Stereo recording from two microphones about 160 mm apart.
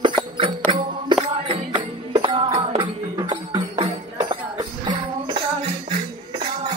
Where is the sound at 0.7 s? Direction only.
30° right (ahead or behind).